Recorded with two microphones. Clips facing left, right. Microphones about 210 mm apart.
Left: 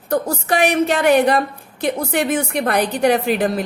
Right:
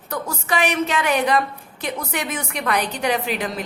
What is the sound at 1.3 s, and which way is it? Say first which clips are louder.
Speech: left 3 dB; 35° left (ahead or behind).